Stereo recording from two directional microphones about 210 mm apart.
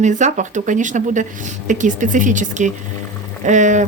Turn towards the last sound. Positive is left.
turn(degrees=-35)  # may be behind; listen again after turning